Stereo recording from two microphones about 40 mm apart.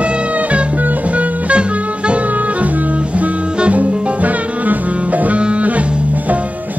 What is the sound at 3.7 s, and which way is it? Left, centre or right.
Music, right.